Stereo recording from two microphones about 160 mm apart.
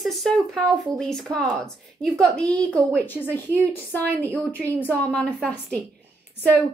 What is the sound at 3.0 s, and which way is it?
Speech, 10° left (ahead or behind).